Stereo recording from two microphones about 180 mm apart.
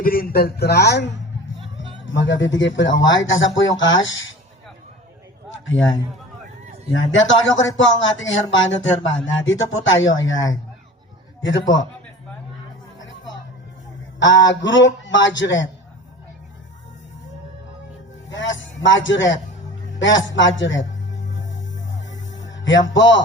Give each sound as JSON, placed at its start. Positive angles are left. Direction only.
{"t": 0.0, "sound": "speech", "side_deg": 55}
{"t": 2.0, "sound": "speech", "side_deg": 90}
{"t": 5.6, "sound": "speech", "side_deg": 90}
{"t": 6.9, "sound": "speech", "side_deg": 90}
{"t": 14.2, "sound": "speech", "side_deg": 90}
{"t": 18.3, "sound": "a man's voice", "side_deg": 90}
{"t": 22.1, "sound": "music", "side_deg": 90}